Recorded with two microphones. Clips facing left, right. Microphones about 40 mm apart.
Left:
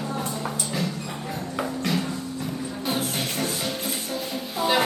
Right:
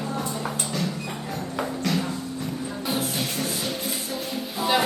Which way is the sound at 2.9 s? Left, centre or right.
Left.